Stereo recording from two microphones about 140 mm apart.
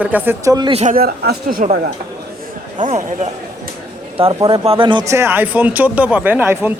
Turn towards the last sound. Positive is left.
turn(degrees=-15)  # may be behind; listen again after turning